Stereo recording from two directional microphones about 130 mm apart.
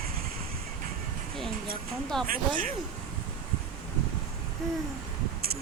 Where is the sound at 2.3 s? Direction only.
90° right.